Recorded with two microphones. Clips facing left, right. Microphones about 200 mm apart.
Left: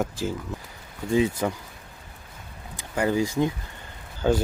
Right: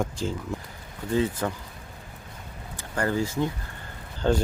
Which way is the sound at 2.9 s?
15° left (ahead or behind).